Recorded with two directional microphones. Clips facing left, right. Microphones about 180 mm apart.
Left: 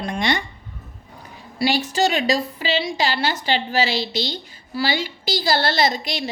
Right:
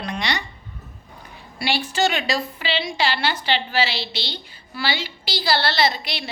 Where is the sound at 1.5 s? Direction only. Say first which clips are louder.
Left 3 dB; 40° left (ahead or behind).